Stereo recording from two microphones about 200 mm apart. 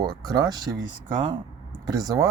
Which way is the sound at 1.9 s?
20° right (ahead or behind).